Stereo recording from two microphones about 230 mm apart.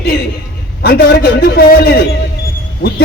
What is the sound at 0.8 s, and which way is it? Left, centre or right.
A man's voice, left.